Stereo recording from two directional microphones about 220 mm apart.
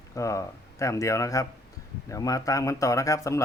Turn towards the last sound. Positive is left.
turn(degrees=15)  # may be behind; listen again after turning